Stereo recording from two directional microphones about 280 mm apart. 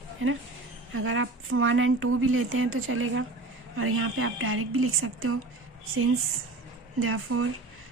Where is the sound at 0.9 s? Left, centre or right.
Right.